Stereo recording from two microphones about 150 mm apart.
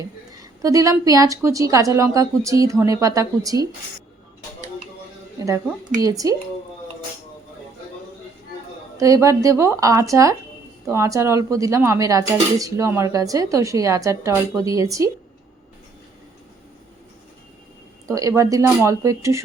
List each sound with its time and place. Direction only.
0.6 s speech: 20° right (ahead or behind)
6.0 s speech: 25° right (ahead or behind)
9.0 s speech: 20° right (ahead or behind)
18.1 s speech: 20° right (ahead or behind)